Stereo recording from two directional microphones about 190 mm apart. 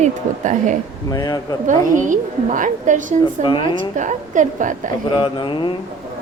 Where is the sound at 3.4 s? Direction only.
25° left (ahead or behind).